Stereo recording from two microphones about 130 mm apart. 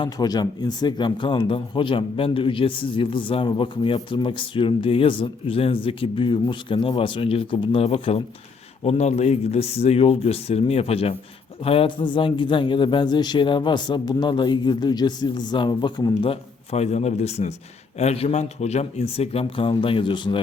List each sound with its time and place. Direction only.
0.0 s speech: 30° left (ahead or behind)